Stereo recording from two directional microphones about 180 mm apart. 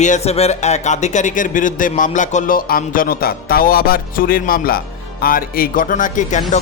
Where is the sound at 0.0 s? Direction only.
40° left (ahead or behind).